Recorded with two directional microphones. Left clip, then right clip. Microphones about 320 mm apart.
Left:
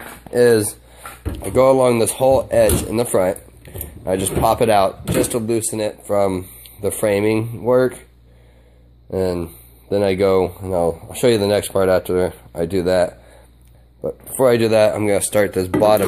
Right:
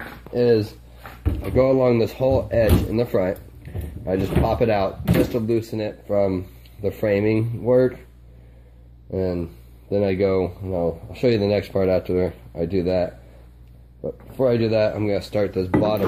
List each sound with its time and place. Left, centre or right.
1.8 s speech: centre
9.1 s speech: centre
14.4 s speech: centre